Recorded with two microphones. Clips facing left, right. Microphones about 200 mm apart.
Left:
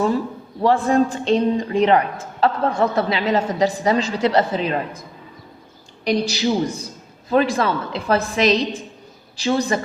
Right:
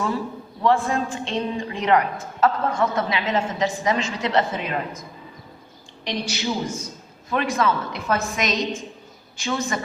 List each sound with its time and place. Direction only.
0.6 s a woman's voice: 35° left (ahead or behind)
6.2 s a woman's voice: 35° left (ahead or behind)